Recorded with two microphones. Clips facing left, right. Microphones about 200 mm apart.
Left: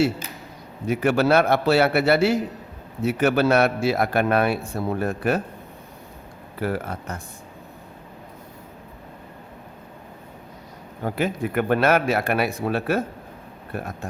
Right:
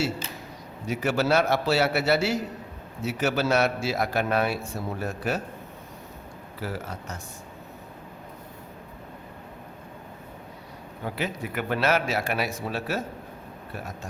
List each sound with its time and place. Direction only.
0.9 s a man's voice: 55° left (ahead or behind)
6.6 s a man's voice: 55° left (ahead or behind)
11.0 s a man's voice: 50° left (ahead or behind)